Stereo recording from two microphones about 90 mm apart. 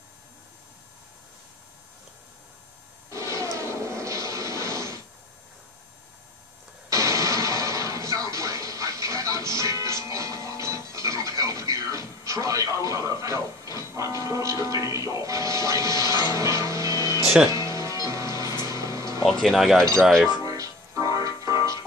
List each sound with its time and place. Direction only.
3.1 s a sound: 35° right (ahead or behind)
3.5 s music: 35° right (ahead or behind)
6.9 s music: 35° right (ahead or behind)
19.4 s chink: centre (ahead or behind)
20.4 s music: 35° right (ahead or behind)